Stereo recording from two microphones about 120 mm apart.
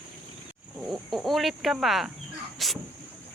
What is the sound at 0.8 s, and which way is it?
Speech, centre (ahead or behind).